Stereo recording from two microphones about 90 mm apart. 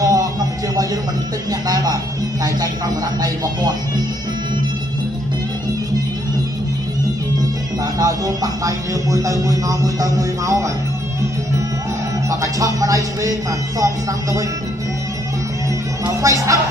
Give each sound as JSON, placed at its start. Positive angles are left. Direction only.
{"t": 0.0, "sound": "a sound", "side_deg": -40}
{"t": 1.7, "sound": "speech", "side_deg": -40}
{"t": 8.0, "sound": "speech", "side_deg": -40}
{"t": 12.3, "sound": "speech", "side_deg": -35}
{"t": 16.2, "sound": "speech", "side_deg": -40}